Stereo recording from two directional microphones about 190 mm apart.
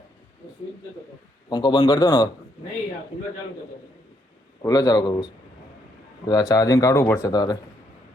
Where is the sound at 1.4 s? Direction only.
20° left (ahead or behind).